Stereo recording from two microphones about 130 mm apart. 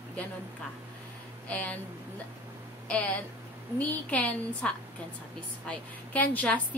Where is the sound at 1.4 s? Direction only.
10° left (ahead or behind).